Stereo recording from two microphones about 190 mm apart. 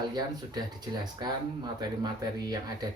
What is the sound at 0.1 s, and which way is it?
Speech, 20° right (ahead or behind).